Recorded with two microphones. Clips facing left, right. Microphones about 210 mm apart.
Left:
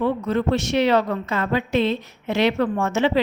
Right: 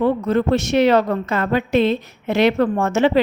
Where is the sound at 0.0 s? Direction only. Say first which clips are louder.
Right 4 dB; 45° right (ahead or behind).